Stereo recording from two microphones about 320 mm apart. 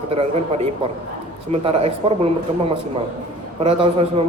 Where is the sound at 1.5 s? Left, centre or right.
Centre.